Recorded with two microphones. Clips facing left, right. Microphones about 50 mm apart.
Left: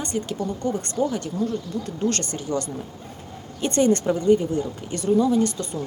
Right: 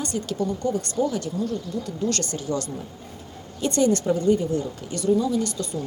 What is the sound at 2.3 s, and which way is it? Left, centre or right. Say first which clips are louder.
Speech: left 1 dB; left.